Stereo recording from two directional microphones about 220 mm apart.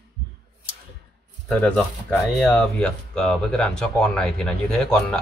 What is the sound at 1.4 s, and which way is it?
Speech, 5° left (ahead or behind).